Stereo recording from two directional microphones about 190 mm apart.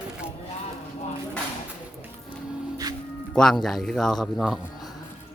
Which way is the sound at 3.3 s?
Centre (ahead or behind).